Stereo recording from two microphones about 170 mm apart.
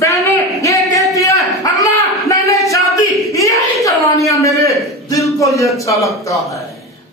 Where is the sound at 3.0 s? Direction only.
20° left (ahead or behind).